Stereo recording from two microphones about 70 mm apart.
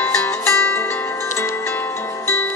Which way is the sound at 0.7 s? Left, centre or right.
Left.